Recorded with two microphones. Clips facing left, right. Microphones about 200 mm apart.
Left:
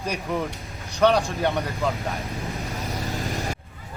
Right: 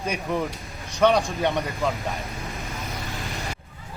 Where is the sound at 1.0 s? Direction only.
15° right (ahead or behind).